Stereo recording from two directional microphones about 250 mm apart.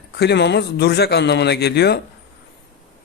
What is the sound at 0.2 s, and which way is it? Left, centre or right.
Speech, left.